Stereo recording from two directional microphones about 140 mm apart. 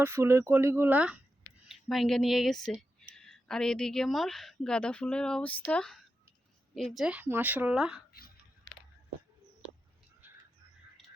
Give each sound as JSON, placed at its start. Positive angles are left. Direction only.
{"t": 0.0, "sound": "speech", "side_deg": -20}
{"t": 6.9, "sound": "speech", "side_deg": -5}
{"t": 10.2, "sound": "bird", "side_deg": -15}